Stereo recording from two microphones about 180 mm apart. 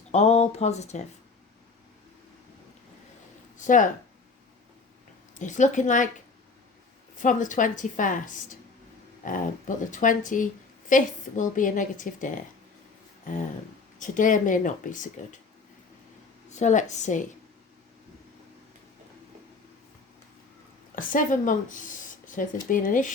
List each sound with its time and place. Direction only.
0.1 s speech: 35° left (ahead or behind)
3.6 s speech: 45° left (ahead or behind)
5.4 s speech: 45° left (ahead or behind)
7.2 s speech: 45° left (ahead or behind)
14.0 s speech: 45° left (ahead or behind)
16.5 s speech: 40° left (ahead or behind)
20.9 s speech: 50° left (ahead or behind)